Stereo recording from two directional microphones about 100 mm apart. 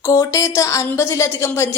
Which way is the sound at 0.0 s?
30° left (ahead or behind).